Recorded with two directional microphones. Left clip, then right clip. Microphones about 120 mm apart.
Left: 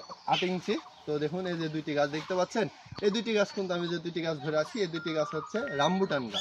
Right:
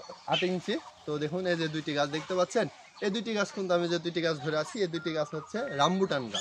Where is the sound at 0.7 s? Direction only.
30° right (ahead or behind).